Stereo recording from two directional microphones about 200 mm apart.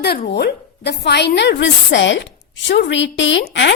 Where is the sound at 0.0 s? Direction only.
55° left (ahead or behind).